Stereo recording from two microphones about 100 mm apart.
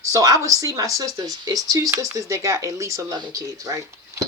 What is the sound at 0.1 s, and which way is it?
A woman's voice, 35° right (ahead or behind).